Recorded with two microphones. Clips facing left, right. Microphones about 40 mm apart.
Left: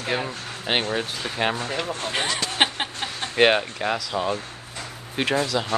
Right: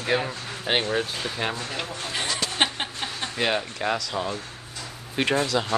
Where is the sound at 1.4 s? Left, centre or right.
Left.